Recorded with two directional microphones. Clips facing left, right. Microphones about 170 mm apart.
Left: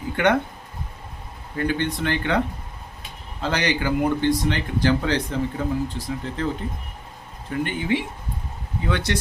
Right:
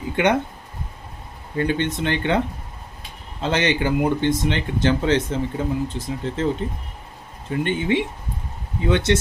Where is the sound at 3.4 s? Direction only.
25° right (ahead or behind).